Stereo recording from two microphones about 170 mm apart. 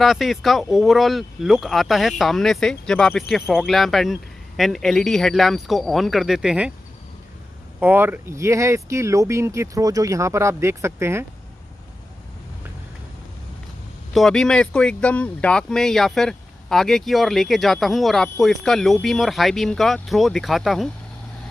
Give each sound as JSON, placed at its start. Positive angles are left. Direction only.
{"t": 0.0, "sound": "speech", "side_deg": 0}
{"t": 7.8, "sound": "speech", "side_deg": -10}
{"t": 14.1, "sound": "speech", "side_deg": 0}